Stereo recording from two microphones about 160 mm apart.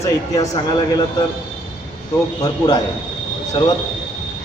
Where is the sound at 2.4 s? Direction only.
25° left (ahead or behind).